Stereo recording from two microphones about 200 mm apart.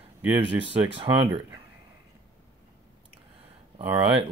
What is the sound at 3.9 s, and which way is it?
Speech, 25° right (ahead or behind).